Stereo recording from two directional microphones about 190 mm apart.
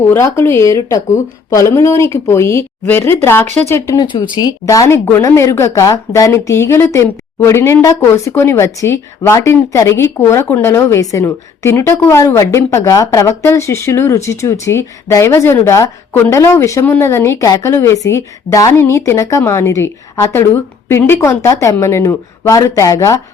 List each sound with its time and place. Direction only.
0.1 s speech: 15° left (ahead or behind)